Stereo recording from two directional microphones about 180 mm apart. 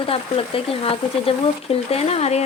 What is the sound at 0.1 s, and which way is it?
Speech, 30° left (ahead or behind).